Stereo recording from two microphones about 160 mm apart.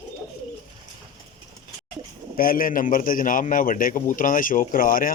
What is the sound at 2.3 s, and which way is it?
A man's voice, 65° left (ahead or behind).